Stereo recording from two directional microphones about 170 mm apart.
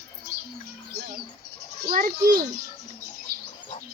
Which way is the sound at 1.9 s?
55° right (ahead or behind).